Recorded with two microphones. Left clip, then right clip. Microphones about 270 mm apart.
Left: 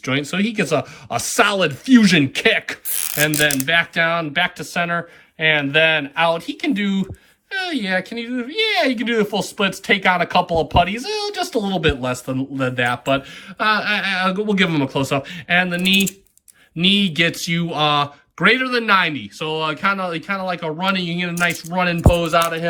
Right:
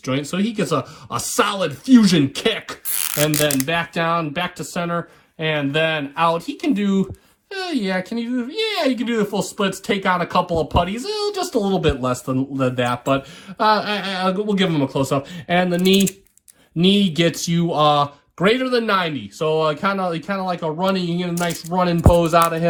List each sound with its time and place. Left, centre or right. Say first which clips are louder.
0.0 s speech: left 2 dB; centre
16.8 s speech: left 1 dB; centre
22.1 s music: right 5 dB; right